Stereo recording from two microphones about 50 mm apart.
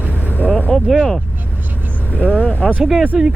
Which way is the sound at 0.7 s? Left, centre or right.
Centre.